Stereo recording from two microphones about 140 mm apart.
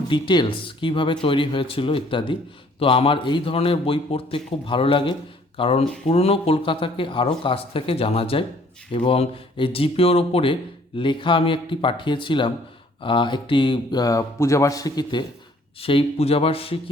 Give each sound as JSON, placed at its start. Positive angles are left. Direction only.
{"t": 0.1, "sound": "speech", "side_deg": 35}
{"t": 15.8, "sound": "speech", "side_deg": 40}